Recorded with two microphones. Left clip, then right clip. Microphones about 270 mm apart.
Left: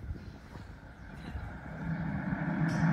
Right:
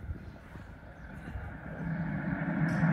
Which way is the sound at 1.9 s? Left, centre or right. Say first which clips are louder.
Right 1 dB; centre.